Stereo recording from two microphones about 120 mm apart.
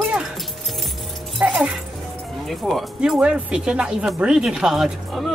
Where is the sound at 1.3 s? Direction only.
10° right (ahead or behind).